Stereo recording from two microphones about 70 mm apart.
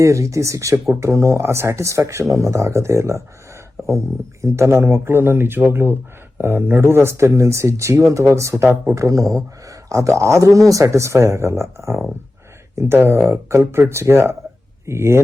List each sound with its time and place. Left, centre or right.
0.0 s speech: right